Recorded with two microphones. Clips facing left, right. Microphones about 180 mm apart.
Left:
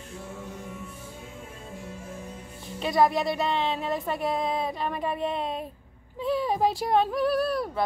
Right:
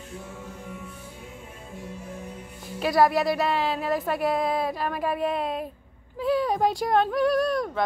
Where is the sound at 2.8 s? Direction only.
Centre (ahead or behind).